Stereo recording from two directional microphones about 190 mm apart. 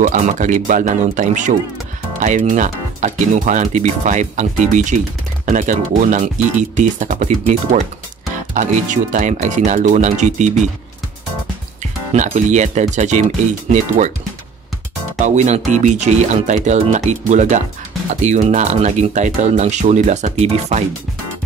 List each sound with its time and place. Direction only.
0.0 s speech: 45° right (ahead or behind)
12.1 s speech: 40° right (ahead or behind)
15.2 s speech: 40° right (ahead or behind)